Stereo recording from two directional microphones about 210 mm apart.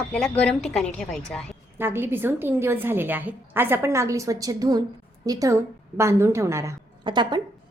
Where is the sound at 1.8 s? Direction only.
10° right (ahead or behind).